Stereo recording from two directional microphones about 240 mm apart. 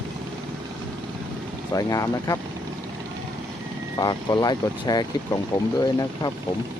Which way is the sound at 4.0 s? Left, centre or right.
Centre.